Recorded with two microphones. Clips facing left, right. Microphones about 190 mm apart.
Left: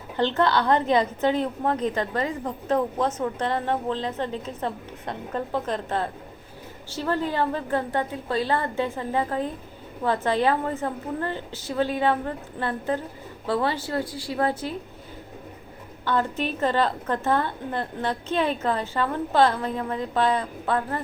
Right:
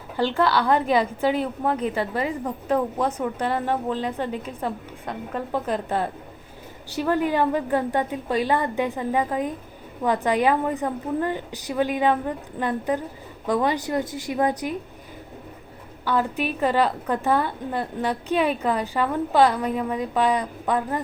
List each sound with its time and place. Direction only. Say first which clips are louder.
0.3 s a woman's voice: right 1 dB; 10° right (ahead or behind)
16.0 s a woman's voice: right 1 dB; 10° right (ahead or behind)